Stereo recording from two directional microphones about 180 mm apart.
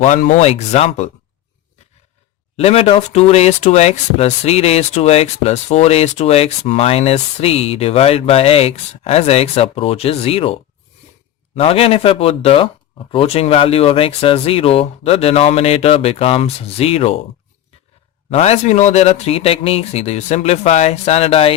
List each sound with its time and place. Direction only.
0.0 s speech: 40° left (ahead or behind)
2.6 s speech: 35° left (ahead or behind)
18.3 s speech: 35° left (ahead or behind)